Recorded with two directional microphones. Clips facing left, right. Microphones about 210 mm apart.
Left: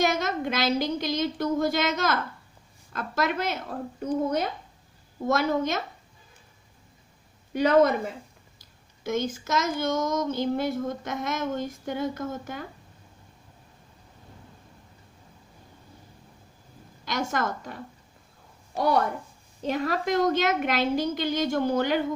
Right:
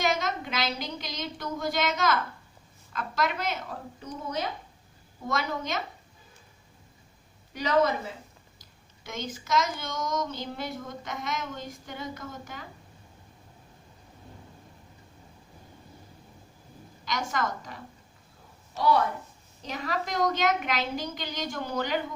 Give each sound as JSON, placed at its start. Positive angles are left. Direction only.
{"t": 0.0, "sound": "speech", "side_deg": 50}
{"t": 7.5, "sound": "speech", "side_deg": 50}
{"t": 9.0, "sound": "speech", "side_deg": 50}
{"t": 17.1, "sound": "speech", "side_deg": 50}